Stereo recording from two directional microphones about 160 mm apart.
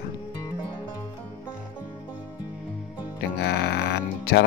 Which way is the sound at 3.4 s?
90° left.